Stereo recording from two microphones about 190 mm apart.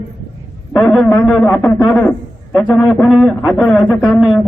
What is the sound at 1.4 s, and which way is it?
Speech, 15° left (ahead or behind).